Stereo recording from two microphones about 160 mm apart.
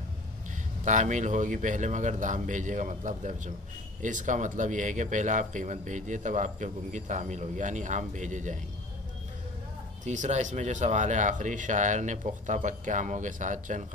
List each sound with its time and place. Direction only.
0.8 s a man's voice: 50° right (ahead or behind)
10.0 s a man's voice: 50° right (ahead or behind)